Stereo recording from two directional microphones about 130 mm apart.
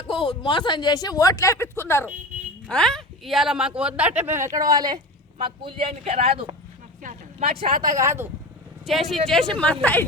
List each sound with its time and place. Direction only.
0.1 s speech: 40° left (ahead or behind); by 2.0 s 20° left (ahead or behind)
2.6 s speech: 5° left (ahead or behind); by 4.9 s 30° right (ahead or behind)
5.4 s speech: 40° right (ahead or behind)
7.0 s vehicle: 75° right (ahead or behind)
7.4 s speech: 45° right (ahead or behind)
7.8 s speech: 25° right (ahead or behind)
8.9 s a woman's voice: centre (ahead or behind)